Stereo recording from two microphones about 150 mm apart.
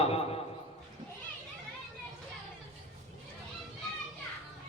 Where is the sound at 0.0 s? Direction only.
40° left (ahead or behind).